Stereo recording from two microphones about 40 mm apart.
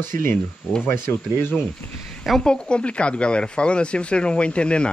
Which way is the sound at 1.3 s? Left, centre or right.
Left.